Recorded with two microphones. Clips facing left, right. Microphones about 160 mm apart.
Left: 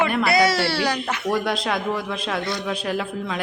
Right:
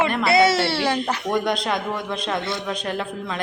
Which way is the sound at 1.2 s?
5° left (ahead or behind).